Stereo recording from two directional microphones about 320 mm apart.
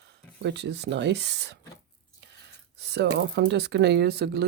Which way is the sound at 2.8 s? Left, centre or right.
Right.